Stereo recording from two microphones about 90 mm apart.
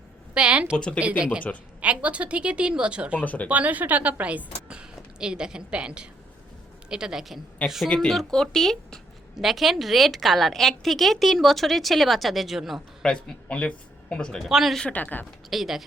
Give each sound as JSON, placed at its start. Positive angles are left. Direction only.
{"t": 0.3, "sound": "a woman's voice", "side_deg": -10}
{"t": 3.2, "sound": "speech", "side_deg": 15}
{"t": 3.5, "sound": "a woman's voice", "side_deg": -15}
{"t": 7.9, "sound": "a woman's voice", "side_deg": 5}
{"t": 13.0, "sound": "speech", "side_deg": 10}
{"t": 14.4, "sound": "a woman's voice", "side_deg": -5}
{"t": 14.9, "sound": "speech", "side_deg": 20}
{"t": 15.4, "sound": "speech", "side_deg": -5}